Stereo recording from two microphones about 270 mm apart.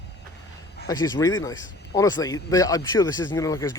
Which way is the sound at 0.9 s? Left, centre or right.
Centre.